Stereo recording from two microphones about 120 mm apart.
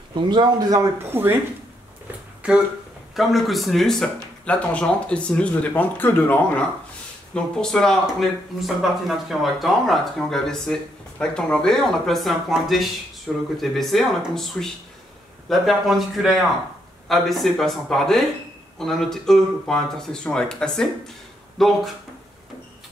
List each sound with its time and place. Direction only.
0.1 s a man's voice: 40° right (ahead or behind)
1.1 s speech: 15° right (ahead or behind)
3.2 s speech: centre (ahead or behind)